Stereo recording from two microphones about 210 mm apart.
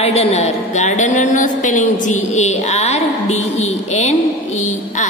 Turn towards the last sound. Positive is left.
turn(degrees=30)  # may be behind; listen again after turning